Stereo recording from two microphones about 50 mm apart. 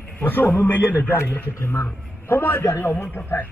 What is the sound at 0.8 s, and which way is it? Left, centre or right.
Speech, left.